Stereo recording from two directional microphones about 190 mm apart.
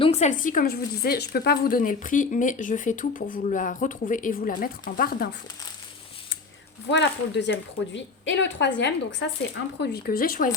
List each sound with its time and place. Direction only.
0.0 s a woman's voice: 35° left (ahead or behind)
6.9 s a woman's voice: 65° left (ahead or behind)
9.8 s a woman's voice: 55° left (ahead or behind)